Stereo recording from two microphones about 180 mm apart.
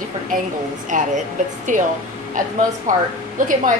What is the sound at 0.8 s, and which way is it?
A woman's voice, 45° right (ahead or behind).